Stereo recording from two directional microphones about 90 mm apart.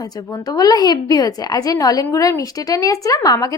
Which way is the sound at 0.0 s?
45° left (ahead or behind).